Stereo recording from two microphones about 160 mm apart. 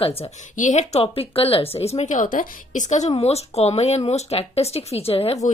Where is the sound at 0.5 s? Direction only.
50° left (ahead or behind).